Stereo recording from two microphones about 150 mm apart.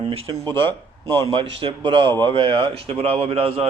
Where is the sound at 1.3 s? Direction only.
35° right (ahead or behind).